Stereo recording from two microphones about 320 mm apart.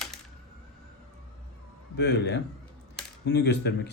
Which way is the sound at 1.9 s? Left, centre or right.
Left.